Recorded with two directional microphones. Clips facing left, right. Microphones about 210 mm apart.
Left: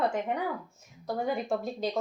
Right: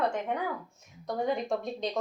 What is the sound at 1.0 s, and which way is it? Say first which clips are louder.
Speech: even; 5° left (ahead or behind).